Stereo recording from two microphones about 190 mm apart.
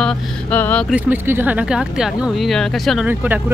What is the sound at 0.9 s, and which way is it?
Speech, 10° right (ahead or behind).